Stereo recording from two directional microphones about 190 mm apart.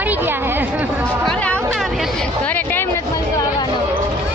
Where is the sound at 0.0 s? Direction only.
10° right (ahead or behind).